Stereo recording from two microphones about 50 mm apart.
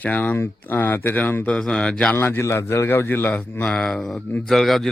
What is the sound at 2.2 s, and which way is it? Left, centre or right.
A man's voice, left.